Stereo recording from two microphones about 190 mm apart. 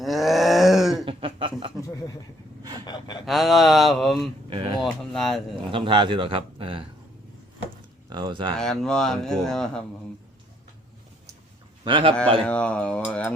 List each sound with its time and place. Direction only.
0.0 s groan: centre (ahead or behind)
1.0 s a sound: 30° right (ahead or behind)
1.9 s a sound: 20° left (ahead or behind)
2.8 s gasp: 20° left (ahead or behind)
3.2 s speech: centre (ahead or behind)
4.4 s a sound: 25° right (ahead or behind)
4.8 s speech: centre (ahead or behind)
5.7 s speech: 25° right (ahead or behind)
8.1 s speech: 25° right (ahead or behind)
8.5 s speech: 5° left (ahead or behind)
11.9 s speech: 25° right (ahead or behind)
12.5 s speech: 5° left (ahead or behind)